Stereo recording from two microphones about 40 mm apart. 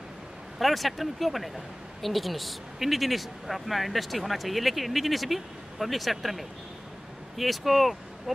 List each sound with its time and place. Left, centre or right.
0.6 s speech: centre